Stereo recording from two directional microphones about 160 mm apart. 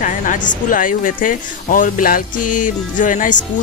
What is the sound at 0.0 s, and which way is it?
Speech, 55° left (ahead or behind).